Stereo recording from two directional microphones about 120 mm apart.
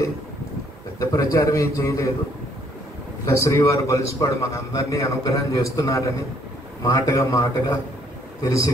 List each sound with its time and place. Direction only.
0.9 s a man's voice: 30° left (ahead or behind)
3.3 s a man's voice: 25° left (ahead or behind)